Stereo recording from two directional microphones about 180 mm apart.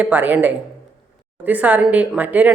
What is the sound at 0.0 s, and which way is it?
Speech, 10° right (ahead or behind).